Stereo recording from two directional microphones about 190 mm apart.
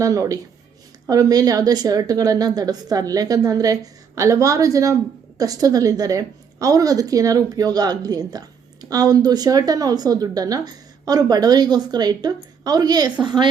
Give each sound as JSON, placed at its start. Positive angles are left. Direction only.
{"t": 0.0, "sound": "a woman's voice", "side_deg": -20}